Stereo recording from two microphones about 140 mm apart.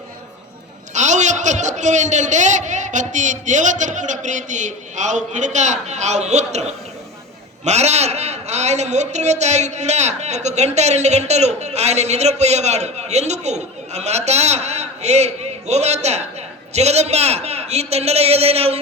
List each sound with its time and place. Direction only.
0.9 s a man's voice: 55° right (ahead or behind)